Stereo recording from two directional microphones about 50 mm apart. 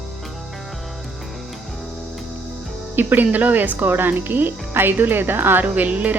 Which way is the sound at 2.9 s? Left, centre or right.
Right.